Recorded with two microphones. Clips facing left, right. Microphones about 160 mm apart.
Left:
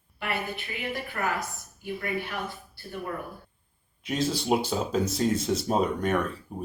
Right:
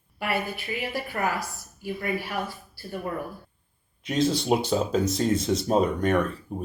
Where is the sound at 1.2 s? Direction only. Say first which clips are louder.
Right 3 dB; 25° right (ahead or behind).